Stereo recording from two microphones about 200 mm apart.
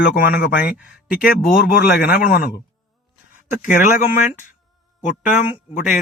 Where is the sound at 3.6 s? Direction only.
40° left (ahead or behind).